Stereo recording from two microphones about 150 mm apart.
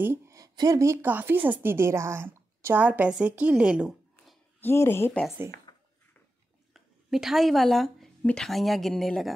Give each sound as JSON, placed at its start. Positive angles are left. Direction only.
{"t": 0.0, "sound": "speech", "side_deg": -15}
{"t": 4.6, "sound": "speech", "side_deg": 15}
{"t": 6.7, "sound": "a woman's voice", "side_deg": 0}